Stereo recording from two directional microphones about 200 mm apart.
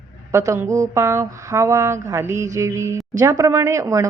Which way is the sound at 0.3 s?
15° right (ahead or behind).